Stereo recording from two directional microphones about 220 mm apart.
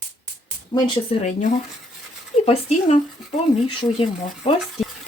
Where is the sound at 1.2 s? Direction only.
35° left (ahead or behind).